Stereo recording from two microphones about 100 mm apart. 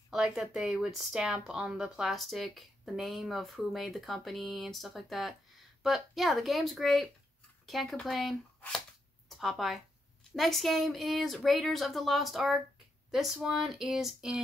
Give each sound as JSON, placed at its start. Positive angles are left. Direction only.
{"t": 0.1, "sound": "speech", "side_deg": -5}
{"t": 9.4, "sound": "speech", "side_deg": 0}